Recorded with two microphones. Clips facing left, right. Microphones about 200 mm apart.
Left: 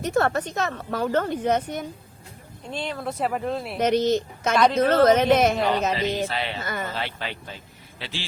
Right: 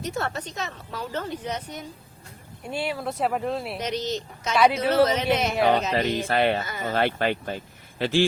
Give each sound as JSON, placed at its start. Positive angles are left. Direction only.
{"t": 0.0, "sound": "a woman's voice", "side_deg": 55}
{"t": 2.6, "sound": "speech", "side_deg": -10}
{"t": 3.8, "sound": "a woman's voice", "side_deg": 55}
{"t": 4.5, "sound": "speech", "side_deg": -5}
{"t": 5.0, "sound": "a woman's voice", "side_deg": 50}
{"t": 5.9, "sound": "speech", "side_deg": -55}